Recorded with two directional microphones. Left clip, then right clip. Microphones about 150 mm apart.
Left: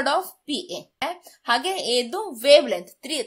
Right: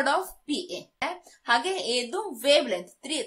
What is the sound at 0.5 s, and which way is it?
A woman's voice, 45° left (ahead or behind).